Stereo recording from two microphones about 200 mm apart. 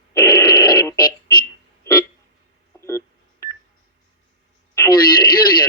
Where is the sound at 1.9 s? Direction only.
15° left (ahead or behind).